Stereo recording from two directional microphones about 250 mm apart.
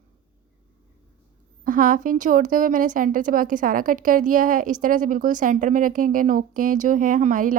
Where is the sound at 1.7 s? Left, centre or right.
Right.